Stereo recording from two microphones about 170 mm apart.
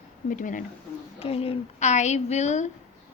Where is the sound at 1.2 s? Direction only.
35° left (ahead or behind).